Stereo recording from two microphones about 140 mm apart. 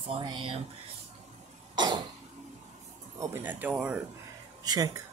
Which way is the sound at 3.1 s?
20° right (ahead or behind).